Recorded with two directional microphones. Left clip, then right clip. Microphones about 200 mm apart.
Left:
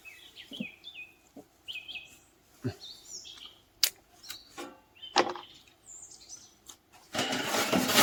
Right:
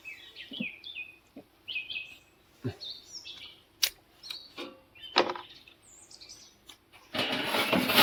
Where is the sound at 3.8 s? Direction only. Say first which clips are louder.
Even; 15° left (ahead or behind).